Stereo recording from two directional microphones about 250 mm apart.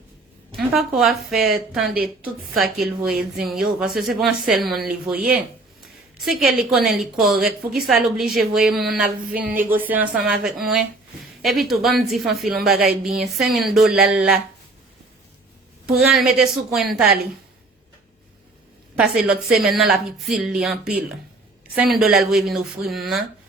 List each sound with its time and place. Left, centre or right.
0.7 s speech: centre
5.8 s a sound: centre
6.8 s speech: centre
16.0 s speech: centre
18.9 s speech: centre